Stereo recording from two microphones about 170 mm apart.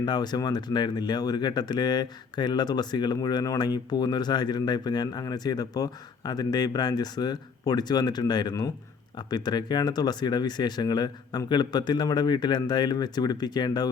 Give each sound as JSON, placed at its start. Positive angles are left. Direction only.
{"t": 0.0, "sound": "speech", "side_deg": 25}